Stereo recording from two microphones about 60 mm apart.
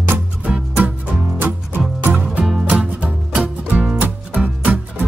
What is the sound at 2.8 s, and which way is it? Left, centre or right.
Music, right.